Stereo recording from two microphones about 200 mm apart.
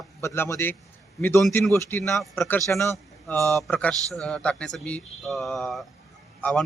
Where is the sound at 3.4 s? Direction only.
15° right (ahead or behind).